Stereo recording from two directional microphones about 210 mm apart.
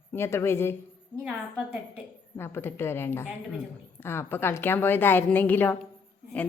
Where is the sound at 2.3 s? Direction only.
10° left (ahead or behind).